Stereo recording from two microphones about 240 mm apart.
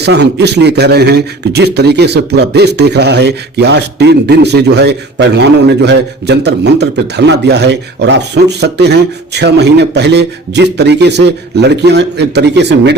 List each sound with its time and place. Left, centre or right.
0.0 s a man's voice: right